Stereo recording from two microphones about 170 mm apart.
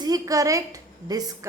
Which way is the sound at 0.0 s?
20° right (ahead or behind).